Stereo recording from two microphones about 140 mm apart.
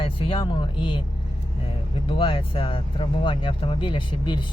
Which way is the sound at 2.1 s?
35° left (ahead or behind).